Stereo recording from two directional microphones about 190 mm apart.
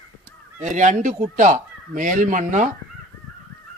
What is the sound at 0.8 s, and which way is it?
Speech, 40° right (ahead or behind).